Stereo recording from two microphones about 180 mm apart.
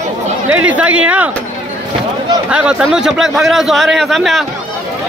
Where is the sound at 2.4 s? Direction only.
5° right (ahead or behind).